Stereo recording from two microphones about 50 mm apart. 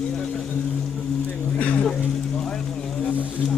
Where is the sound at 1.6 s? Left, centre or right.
Left.